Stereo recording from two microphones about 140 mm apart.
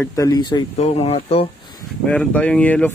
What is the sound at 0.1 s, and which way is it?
Speech, 25° left (ahead or behind).